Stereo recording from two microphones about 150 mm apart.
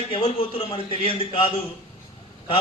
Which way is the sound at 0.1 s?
35° left (ahead or behind).